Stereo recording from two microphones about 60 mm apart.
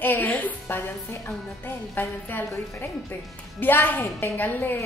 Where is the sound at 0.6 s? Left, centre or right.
Left.